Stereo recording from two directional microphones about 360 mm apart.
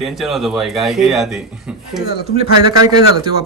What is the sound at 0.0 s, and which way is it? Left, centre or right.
A man's voice, centre.